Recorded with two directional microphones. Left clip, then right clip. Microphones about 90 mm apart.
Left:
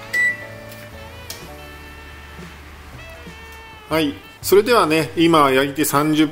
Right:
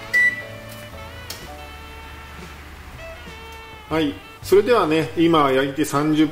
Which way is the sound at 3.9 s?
40° left (ahead or behind).